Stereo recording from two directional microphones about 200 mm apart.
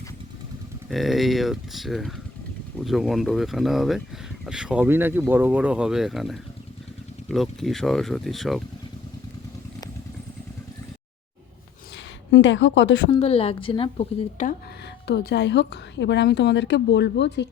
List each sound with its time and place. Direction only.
0.9 s speech: centre (ahead or behind)
12.3 s a woman's voice: 65° left (ahead or behind)
13.1 s a woman's voice: 30° left (ahead or behind)
15.0 s a woman's voice: 55° left (ahead or behind)